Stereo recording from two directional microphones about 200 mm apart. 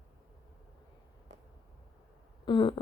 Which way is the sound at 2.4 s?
25° left (ahead or behind).